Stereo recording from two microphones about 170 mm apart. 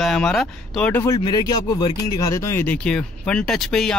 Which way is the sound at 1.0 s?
20° left (ahead or behind).